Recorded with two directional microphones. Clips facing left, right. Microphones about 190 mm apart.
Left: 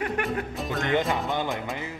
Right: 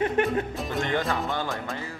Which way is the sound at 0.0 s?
25° right (ahead or behind).